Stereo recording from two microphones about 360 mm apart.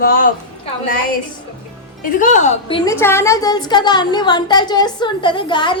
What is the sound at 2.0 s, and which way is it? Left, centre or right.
A woman's voice, left.